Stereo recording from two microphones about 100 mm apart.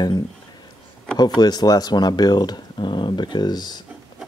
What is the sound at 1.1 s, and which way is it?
Speech, 45° left (ahead or behind).